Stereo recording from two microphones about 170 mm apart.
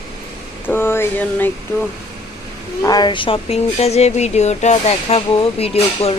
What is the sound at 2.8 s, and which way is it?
Speech, 25° left (ahead or behind).